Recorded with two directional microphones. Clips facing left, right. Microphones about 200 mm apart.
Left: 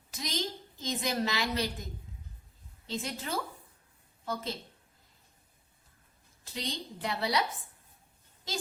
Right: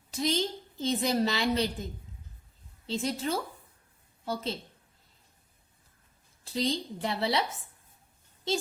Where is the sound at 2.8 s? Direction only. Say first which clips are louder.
Right 5 dB; 30° right (ahead or behind).